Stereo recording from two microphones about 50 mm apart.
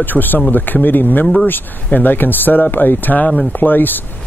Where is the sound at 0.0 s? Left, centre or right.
Left.